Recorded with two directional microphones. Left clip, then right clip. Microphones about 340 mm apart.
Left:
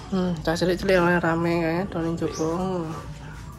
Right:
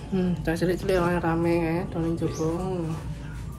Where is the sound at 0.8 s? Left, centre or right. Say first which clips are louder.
Left 6 dB; left.